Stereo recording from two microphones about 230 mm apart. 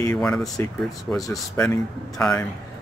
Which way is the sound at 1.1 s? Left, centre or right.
Centre.